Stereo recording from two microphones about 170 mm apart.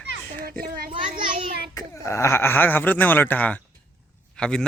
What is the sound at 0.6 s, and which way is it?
Speech, 60° right (ahead or behind).